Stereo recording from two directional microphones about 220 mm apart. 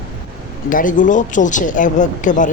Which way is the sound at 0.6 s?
35° left (ahead or behind).